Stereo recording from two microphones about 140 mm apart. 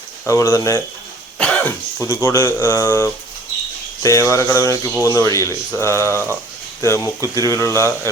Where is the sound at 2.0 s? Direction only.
20° left (ahead or behind).